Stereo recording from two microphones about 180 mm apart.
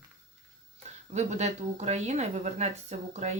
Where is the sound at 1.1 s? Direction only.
40° right (ahead or behind).